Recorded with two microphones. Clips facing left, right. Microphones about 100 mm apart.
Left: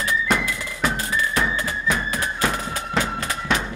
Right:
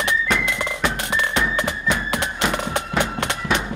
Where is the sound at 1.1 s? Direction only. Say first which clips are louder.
Right 1 dB; 75° right (ahead or behind).